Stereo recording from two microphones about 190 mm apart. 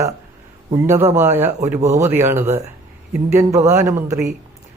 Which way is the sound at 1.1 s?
10° right (ahead or behind).